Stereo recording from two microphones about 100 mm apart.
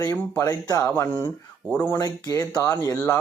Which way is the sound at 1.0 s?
25° left (ahead or behind).